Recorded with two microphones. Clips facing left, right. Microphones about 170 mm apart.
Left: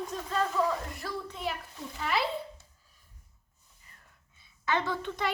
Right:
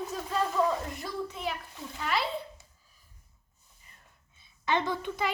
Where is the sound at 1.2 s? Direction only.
Centre (ahead or behind).